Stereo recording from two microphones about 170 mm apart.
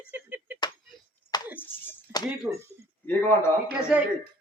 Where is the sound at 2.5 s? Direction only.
20° right (ahead or behind).